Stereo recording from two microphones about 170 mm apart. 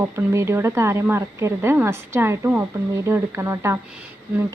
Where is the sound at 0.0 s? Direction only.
15° right (ahead or behind).